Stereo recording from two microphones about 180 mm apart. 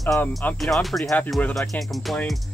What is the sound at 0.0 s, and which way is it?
Speech, 20° left (ahead or behind).